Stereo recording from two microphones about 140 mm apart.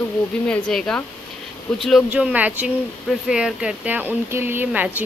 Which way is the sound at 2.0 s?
10° right (ahead or behind).